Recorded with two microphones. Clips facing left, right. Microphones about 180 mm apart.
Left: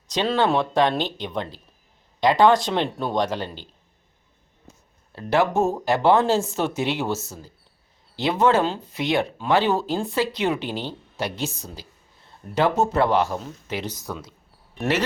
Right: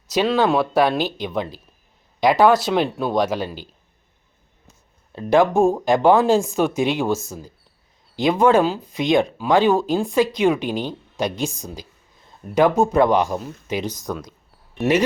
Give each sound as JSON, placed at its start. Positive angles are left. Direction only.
{"t": 0.1, "sound": "speech", "side_deg": -5}
{"t": 5.1, "sound": "speech", "side_deg": -15}